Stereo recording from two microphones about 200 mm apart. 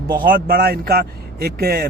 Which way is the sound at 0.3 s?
45° right (ahead or behind).